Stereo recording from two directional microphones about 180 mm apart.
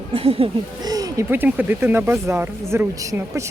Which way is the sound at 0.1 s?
30° right (ahead or behind).